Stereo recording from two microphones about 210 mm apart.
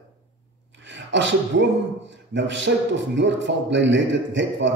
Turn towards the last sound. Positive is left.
turn(degrees=-60)  # may be behind; listen again after turning